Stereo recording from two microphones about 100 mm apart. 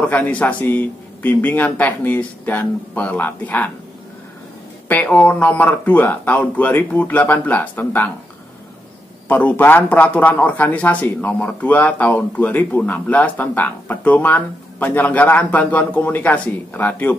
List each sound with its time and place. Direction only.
0.0 s speech: 15° left (ahead or behind)
4.8 s speech: 15° left (ahead or behind)
9.3 s speech: 15° left (ahead or behind)